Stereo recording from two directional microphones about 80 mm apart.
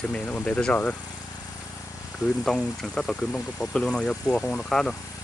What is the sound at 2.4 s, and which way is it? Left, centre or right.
Speech, centre.